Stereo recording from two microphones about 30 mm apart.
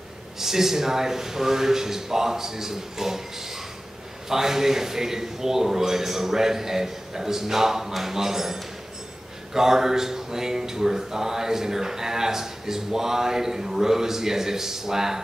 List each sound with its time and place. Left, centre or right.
0.4 s speech: centre